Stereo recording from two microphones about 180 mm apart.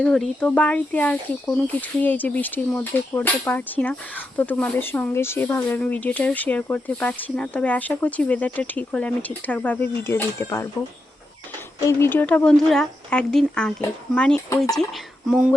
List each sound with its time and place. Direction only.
0.0 s speech: 5° left (ahead or behind)
11.9 s speech: 10° left (ahead or behind)